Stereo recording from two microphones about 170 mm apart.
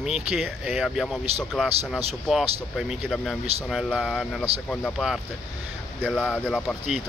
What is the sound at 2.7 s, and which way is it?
Speech, centre (ahead or behind).